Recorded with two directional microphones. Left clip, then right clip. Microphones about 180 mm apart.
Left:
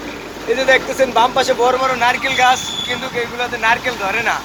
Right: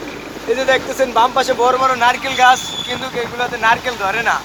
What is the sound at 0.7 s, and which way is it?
Speech, 20° right (ahead or behind).